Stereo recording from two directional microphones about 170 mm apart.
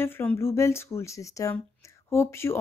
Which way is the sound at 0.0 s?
15° left (ahead or behind).